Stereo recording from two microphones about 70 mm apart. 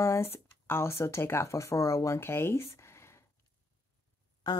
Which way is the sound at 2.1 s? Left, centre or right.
Left.